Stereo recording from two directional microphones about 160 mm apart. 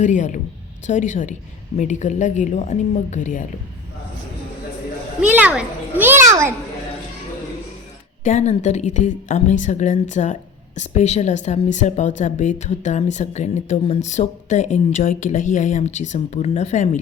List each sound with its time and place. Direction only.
0.0 s a woman's voice: 50° left (ahead or behind)
5.2 s a child's voice: 10° right (ahead or behind)
8.2 s a woman's voice: 50° left (ahead or behind)